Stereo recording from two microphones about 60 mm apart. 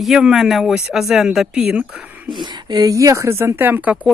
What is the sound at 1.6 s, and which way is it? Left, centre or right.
Speech, right.